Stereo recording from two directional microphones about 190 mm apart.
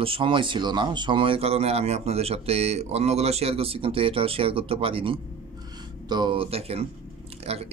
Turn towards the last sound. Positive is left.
turn(degrees=-30)  # may be behind; listen again after turning